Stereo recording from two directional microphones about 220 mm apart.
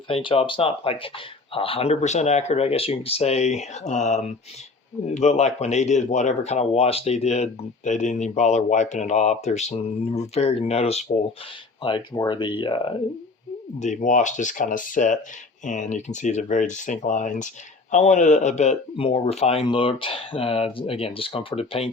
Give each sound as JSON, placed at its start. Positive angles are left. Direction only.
{"t": 0.1, "sound": "speech", "side_deg": 25}
{"t": 13.7, "sound": "speech", "side_deg": 35}